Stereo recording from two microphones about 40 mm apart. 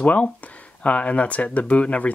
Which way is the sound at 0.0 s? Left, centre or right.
Left.